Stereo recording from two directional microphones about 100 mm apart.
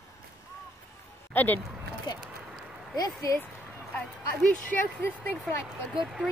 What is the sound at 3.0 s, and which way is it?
Speech, 35° left (ahead or behind).